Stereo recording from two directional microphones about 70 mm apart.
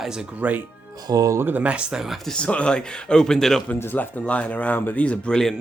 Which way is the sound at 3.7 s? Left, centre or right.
Left.